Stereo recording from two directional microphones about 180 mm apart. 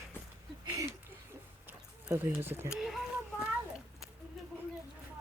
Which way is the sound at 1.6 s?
10° right (ahead or behind).